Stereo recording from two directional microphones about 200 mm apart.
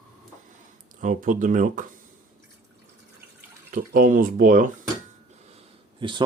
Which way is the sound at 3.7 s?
45° right (ahead or behind).